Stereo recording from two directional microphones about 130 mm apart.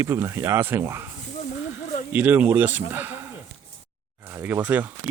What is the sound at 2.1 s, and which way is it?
Speech, 15° right (ahead or behind).